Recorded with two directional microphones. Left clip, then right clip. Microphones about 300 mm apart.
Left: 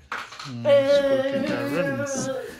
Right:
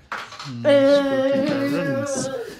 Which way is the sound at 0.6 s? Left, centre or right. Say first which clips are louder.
Right 3 dB; right.